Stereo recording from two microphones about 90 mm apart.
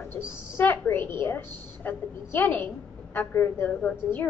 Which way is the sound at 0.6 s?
25° left (ahead or behind).